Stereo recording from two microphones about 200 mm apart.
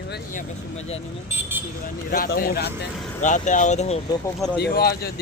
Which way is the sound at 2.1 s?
45° left (ahead or behind).